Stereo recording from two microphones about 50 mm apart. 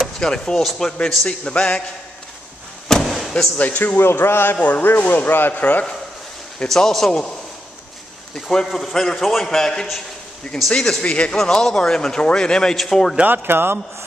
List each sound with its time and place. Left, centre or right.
0.2 s a man's voice: centre
1.2 s a man's voice: left
2.9 s slam: centre
3.5 s speech: left
4.1 s speech: left
4.6 s a man's voice: left
4.8 s speech: left
6.7 s a man's voice: centre
8.4 s a man's voice: centre; by 11.3 s left
11.3 s a man's voice: centre
13.2 s speech: right